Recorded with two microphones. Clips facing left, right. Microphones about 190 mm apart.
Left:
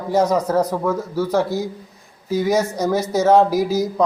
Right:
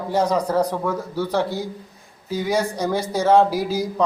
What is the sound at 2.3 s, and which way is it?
Speech, 10° left (ahead or behind).